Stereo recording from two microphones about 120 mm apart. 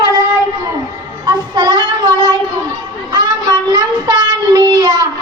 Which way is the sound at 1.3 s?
35° right (ahead or behind).